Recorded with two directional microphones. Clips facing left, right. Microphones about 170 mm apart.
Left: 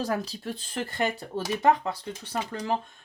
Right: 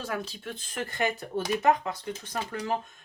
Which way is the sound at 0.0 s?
35° left (ahead or behind).